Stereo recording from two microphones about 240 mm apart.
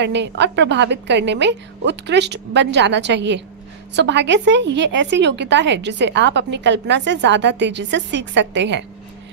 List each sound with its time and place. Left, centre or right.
0.0 s a woman's voice: right